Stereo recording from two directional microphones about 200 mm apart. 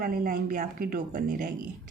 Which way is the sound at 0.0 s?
45° right (ahead or behind).